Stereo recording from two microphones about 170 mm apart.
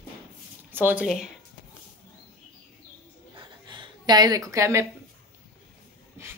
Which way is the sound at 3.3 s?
30° right (ahead or behind).